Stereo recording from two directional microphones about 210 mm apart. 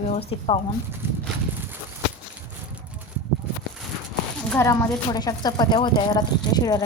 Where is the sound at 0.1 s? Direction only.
30° left (ahead or behind).